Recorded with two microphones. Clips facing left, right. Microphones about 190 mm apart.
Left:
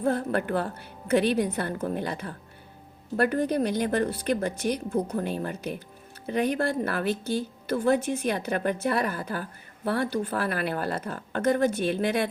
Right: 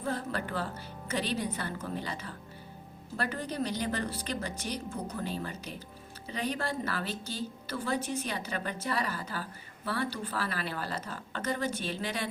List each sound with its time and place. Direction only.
0.0 s a woman's voice: 55° left (ahead or behind)